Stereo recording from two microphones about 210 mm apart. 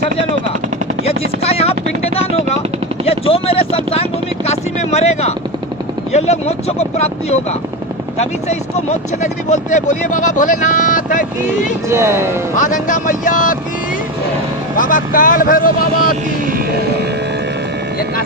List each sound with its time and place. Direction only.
1.0 s helicopter: 30° left (ahead or behind)
3.1 s speech: 25° left (ahead or behind)
11.9 s speech: 10° right (ahead or behind)
12.5 s speech: 35° left (ahead or behind)
14.8 s speech: 40° left (ahead or behind)